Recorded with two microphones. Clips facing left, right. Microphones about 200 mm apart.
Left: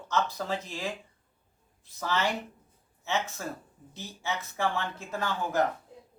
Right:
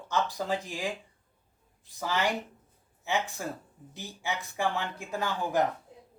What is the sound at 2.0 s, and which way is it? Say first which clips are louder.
A man's voice: even; 15° right (ahead or behind).